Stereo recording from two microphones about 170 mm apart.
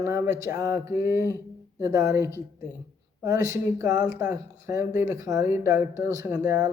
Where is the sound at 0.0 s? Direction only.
20° right (ahead or behind).